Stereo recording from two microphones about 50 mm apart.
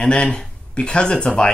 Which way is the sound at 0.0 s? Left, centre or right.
Centre.